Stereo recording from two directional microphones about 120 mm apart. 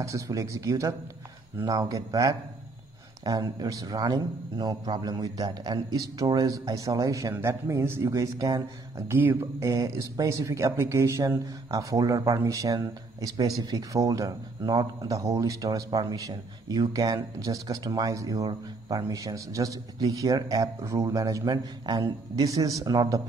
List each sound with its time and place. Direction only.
0.0 s a man's voice: 25° right (ahead or behind)